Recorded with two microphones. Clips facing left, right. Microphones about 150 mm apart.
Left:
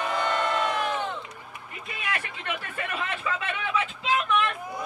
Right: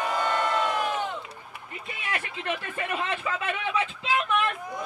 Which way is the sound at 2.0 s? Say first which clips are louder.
Even; 30° right (ahead or behind).